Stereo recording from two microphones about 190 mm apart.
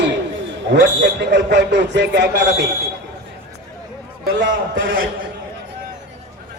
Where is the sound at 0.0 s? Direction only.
65° right (ahead or behind).